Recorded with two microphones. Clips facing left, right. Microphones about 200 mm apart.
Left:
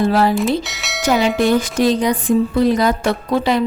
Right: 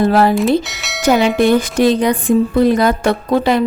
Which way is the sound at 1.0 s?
60° right (ahead or behind).